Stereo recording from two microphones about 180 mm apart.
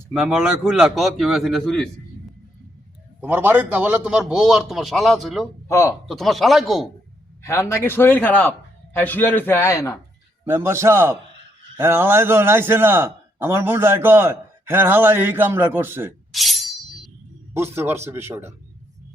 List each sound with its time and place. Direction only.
0.1 s a man's voice: 5° right (ahead or behind)
3.2 s a man's voice: 10° right (ahead or behind)
5.6 s a man's voice: 15° left (ahead or behind)
6.1 s a man's voice: centre (ahead or behind)
7.4 s a man's voice: 15° left (ahead or behind)
10.4 s a man's voice: 15° right (ahead or behind)
16.3 s a sound: centre (ahead or behind)
17.5 s a man's voice: 15° right (ahead or behind)